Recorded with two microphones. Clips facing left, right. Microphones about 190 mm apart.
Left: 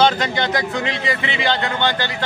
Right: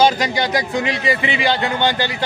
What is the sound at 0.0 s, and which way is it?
Speech, 15° right (ahead or behind).